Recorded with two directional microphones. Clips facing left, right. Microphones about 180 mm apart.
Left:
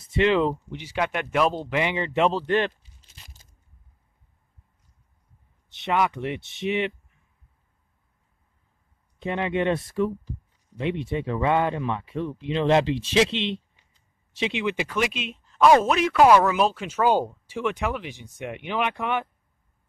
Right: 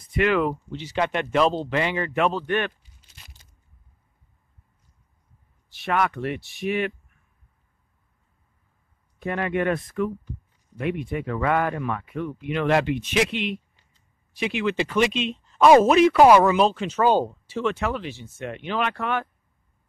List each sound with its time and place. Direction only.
0.0 s speech: 25° left (ahead or behind)
0.7 s speech: 10° left (ahead or behind); by 3.1 s 30° left (ahead or behind)
5.7 s speech: 20° left (ahead or behind)
9.2 s speech: 20° left (ahead or behind)
14.9 s speech: 5° left (ahead or behind)